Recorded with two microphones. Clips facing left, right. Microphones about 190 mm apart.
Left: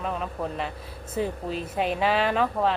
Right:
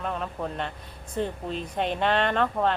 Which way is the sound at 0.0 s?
5° left (ahead or behind).